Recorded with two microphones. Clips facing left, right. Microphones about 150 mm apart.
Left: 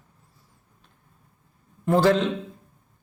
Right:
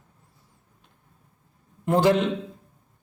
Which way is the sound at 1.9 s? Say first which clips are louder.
Left 1 dB; 20° right (ahead or behind).